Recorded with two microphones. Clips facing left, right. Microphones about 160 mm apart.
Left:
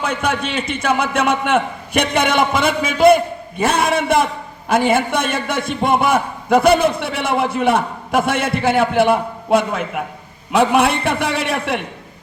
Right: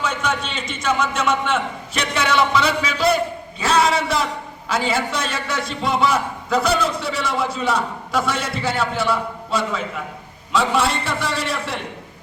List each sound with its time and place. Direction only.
0.0 s a man's voice: 60° left (ahead or behind)